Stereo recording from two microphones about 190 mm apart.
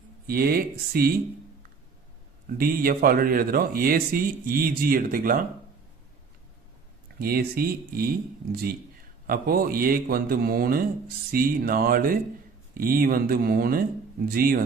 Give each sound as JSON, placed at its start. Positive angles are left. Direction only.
{"t": 0.3, "sound": "a man's voice", "side_deg": -50}
{"t": 2.6, "sound": "a man's voice", "side_deg": -50}
{"t": 7.2, "sound": "a man's voice", "side_deg": -55}
{"t": 9.2, "sound": "a man's voice", "side_deg": -50}